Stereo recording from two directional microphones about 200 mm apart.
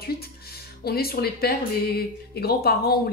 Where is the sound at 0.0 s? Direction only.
50° left (ahead or behind).